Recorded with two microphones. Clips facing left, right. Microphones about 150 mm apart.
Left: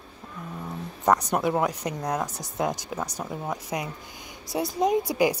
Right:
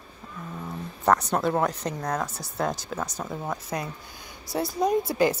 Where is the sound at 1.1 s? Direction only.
15° left (ahead or behind).